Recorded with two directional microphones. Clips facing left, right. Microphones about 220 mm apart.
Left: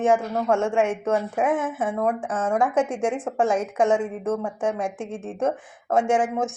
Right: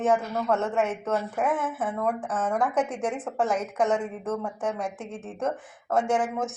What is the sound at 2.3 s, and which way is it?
Speech, 25° left (ahead or behind).